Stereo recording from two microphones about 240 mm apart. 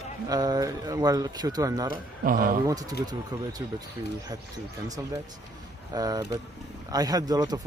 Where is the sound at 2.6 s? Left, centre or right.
Centre.